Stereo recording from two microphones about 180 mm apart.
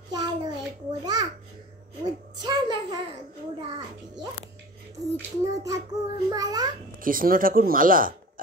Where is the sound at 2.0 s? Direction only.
25° right (ahead or behind).